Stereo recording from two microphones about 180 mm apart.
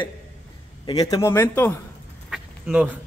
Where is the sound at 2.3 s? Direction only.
5° right (ahead or behind).